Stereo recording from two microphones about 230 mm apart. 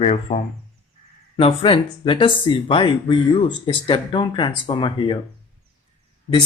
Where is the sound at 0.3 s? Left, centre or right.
Left.